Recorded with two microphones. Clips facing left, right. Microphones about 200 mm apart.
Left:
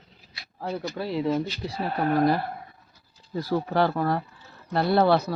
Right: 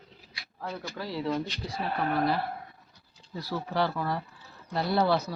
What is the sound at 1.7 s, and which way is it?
Speech, 40° left (ahead or behind).